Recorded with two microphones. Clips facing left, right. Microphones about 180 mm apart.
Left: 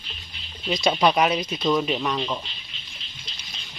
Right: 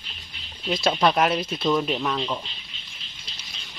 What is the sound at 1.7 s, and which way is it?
Speech, 5° left (ahead or behind).